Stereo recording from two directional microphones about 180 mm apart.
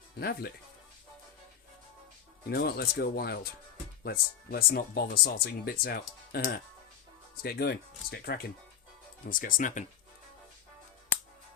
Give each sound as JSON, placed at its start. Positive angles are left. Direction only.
{"t": 0.2, "sound": "speech", "side_deg": 60}
{"t": 2.5, "sound": "speech", "side_deg": 65}